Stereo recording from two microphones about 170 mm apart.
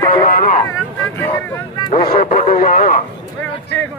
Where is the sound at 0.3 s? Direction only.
50° left (ahead or behind).